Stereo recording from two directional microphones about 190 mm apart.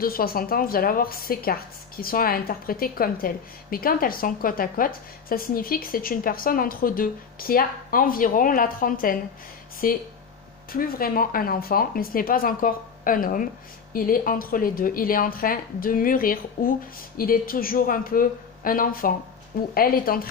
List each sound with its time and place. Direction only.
0.0 s a woman's voice: 50° left (ahead or behind)